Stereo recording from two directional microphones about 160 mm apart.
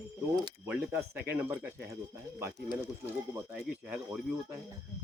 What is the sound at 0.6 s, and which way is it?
Speech, 15° right (ahead or behind).